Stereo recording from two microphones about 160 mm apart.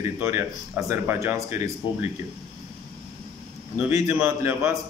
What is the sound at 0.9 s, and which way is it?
Speech, 15° right (ahead or behind).